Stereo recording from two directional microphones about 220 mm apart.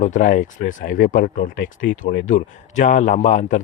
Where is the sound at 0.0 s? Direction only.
35° left (ahead or behind).